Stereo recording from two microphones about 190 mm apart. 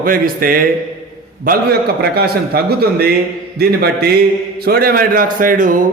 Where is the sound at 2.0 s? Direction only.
55° right (ahead or behind).